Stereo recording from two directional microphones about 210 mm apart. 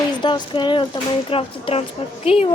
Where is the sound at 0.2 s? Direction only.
20° left (ahead or behind).